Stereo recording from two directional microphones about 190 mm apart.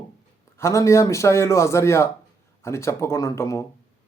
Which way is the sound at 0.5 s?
15° left (ahead or behind).